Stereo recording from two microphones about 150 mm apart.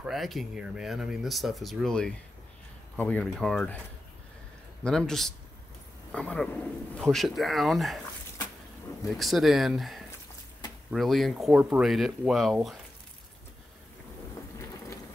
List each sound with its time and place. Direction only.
0.0 s speech: centre (ahead or behind)
4.8 s speech: 5° left (ahead or behind)
8.9 s a sound: 20° left (ahead or behind)
9.2 s speech: centre (ahead or behind)